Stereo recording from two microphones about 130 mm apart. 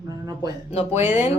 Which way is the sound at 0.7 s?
50° left (ahead or behind).